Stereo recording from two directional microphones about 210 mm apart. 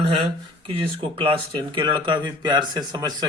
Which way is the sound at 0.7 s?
25° right (ahead or behind).